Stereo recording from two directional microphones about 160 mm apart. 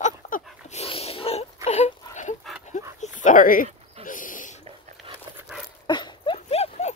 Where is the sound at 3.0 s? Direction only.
50° left (ahead or behind).